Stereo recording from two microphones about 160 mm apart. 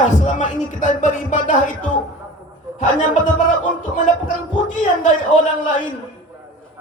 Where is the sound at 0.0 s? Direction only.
50° left (ahead or behind).